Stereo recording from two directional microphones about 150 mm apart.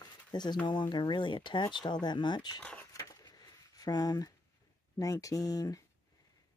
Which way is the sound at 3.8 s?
25° left (ahead or behind).